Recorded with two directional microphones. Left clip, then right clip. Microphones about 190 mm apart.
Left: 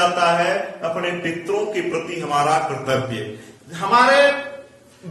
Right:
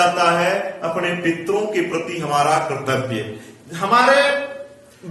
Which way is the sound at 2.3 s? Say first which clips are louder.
Right 1 dB; 15° right (ahead or behind).